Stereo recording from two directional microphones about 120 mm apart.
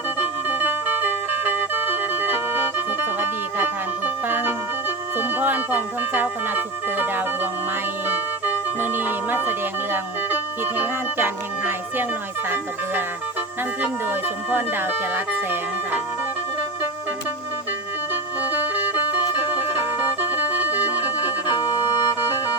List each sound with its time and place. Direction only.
0.2 s music: 15° right (ahead or behind)
8.8 s music: 15° right (ahead or behind)
12.5 s speech: 15° right (ahead or behind)
18.1 s music: 15° right (ahead or behind)